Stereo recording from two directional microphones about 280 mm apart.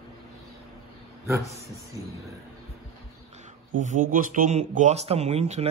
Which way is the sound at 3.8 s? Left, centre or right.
Right.